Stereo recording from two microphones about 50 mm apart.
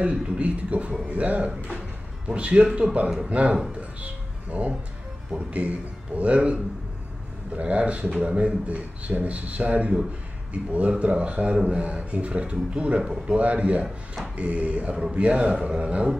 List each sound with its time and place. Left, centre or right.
0.0 s a man's voice: right
4.0 s music: right
5.3 s a man's voice: right
13.8 s speech: centre
14.3 s a man's voice: right